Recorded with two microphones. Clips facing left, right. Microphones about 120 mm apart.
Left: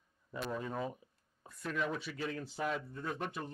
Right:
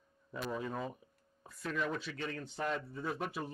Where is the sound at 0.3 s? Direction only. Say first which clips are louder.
Even; centre (ahead or behind).